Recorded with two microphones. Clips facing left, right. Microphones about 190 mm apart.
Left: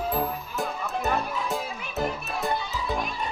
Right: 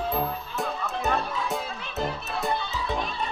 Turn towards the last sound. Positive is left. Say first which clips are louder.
# even
turn(degrees=10)  # may be behind; listen again after turning